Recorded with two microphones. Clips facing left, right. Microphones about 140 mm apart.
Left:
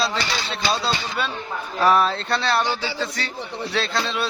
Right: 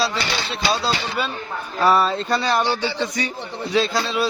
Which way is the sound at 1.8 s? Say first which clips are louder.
Right 1 dB; 5° right (ahead or behind).